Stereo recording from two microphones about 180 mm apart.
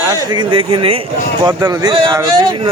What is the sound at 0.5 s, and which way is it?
Speech, 30° right (ahead or behind).